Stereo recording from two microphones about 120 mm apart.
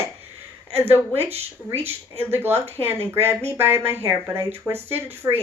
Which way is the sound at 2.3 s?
20° right (ahead or behind).